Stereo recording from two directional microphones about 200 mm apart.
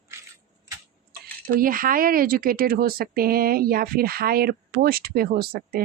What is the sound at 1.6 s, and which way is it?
Speech, 45° right (ahead or behind).